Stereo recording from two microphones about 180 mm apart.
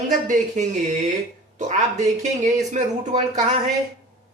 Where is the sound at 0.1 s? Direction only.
45° right (ahead or behind).